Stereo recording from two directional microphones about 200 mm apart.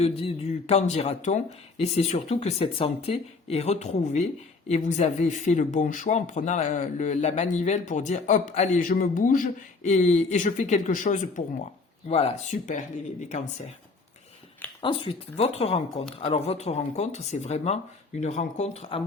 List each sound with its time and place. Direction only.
0.0 s speech: 30° left (ahead or behind)
14.8 s speech: 25° left (ahead or behind)